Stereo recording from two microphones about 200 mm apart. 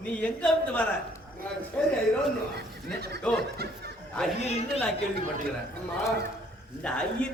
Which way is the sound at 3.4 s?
55° right (ahead or behind).